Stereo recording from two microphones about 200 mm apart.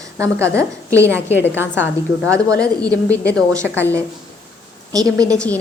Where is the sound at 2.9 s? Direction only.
5° left (ahead or behind).